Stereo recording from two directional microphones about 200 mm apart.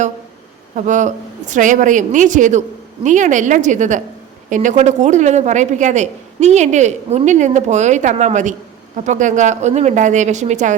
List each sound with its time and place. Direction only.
0.8 s speech: 40° right (ahead or behind)